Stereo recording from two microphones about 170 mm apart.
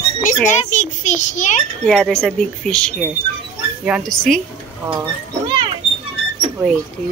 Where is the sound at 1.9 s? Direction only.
5° left (ahead or behind).